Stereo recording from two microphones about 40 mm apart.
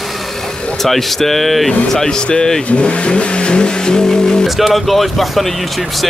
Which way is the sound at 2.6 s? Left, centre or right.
Left.